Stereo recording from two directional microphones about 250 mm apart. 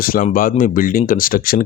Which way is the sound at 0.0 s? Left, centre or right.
Left.